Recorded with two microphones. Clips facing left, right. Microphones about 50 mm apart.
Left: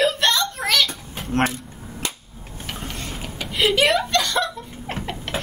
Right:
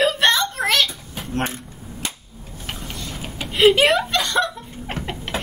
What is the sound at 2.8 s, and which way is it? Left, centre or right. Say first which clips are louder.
Tick-tock: left 1 dB; left.